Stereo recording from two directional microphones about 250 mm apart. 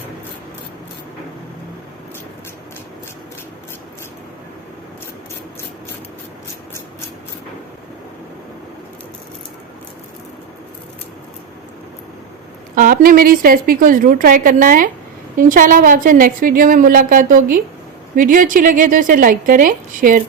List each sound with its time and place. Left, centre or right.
12.7 s a woman's voice: right